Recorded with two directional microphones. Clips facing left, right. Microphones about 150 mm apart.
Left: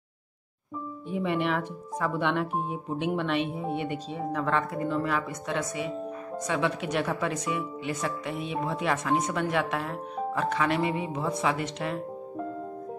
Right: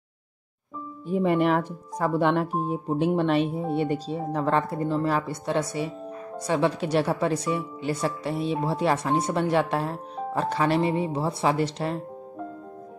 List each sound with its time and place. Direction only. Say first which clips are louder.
1.0 s speech: right 6 dB; 40° right (ahead or behind)